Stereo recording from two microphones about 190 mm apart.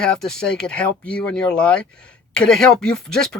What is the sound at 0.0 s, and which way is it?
Speech, 5° left (ahead or behind).